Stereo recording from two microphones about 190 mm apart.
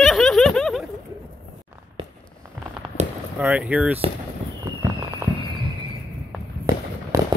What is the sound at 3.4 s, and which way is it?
Speech, 10° right (ahead or behind).